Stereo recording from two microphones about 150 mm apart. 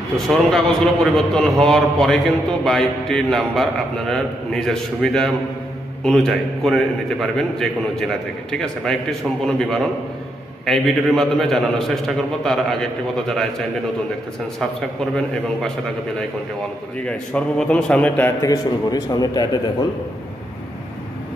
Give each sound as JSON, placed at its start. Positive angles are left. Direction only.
{"t": 0.3, "sound": "a man's voice", "side_deg": 0}
{"t": 17.0, "sound": "a man's voice", "side_deg": 5}
{"t": 18.4, "sound": "a man's voice", "side_deg": 25}